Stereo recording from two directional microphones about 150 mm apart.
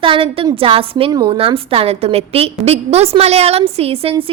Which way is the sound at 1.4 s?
40° right (ahead or behind).